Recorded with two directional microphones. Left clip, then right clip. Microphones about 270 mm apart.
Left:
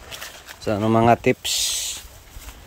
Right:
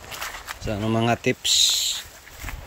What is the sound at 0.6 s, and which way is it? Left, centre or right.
Speech, centre.